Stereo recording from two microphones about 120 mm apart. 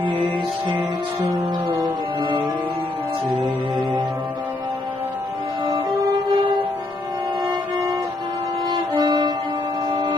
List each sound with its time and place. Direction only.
6.0 s music: 30° right (ahead or behind)
8.7 s music: 35° right (ahead or behind)